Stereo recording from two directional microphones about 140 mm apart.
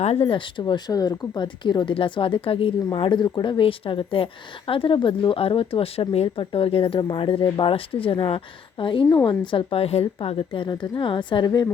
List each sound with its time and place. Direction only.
0.0 s speech: 45° left (ahead or behind)